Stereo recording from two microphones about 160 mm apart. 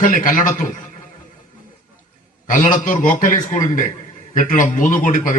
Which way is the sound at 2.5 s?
55° left (ahead or behind).